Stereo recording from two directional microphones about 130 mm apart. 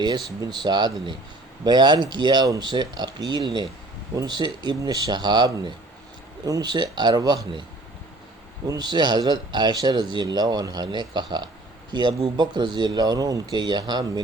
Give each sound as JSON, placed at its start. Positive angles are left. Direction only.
{"t": 0.0, "sound": "speech", "side_deg": -35}
{"t": 8.6, "sound": "speech", "side_deg": -30}